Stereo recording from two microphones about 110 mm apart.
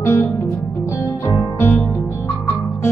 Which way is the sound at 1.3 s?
25° left (ahead or behind).